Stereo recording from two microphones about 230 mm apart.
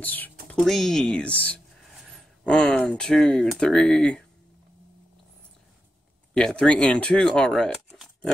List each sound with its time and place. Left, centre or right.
0.0 s speech: centre
6.3 s speech: centre